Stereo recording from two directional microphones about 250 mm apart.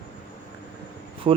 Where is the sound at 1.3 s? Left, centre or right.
Right.